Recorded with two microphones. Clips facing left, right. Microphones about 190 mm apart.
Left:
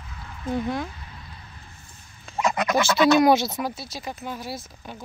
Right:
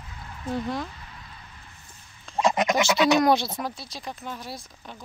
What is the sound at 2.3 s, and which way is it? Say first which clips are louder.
Goose: right 1 dB; 25° right (ahead or behind).